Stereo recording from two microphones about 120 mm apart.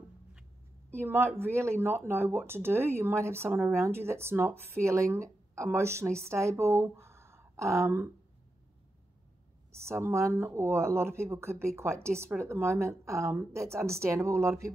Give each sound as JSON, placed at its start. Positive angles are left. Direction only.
{"t": 0.8, "sound": "speech", "side_deg": -20}
{"t": 9.7, "sound": "speech", "side_deg": -20}